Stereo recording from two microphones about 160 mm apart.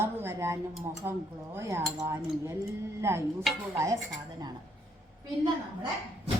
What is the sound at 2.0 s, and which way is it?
A woman's voice, 15° right (ahead or behind).